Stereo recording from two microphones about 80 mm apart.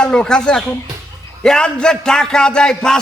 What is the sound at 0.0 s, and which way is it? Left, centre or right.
A man's voice, centre.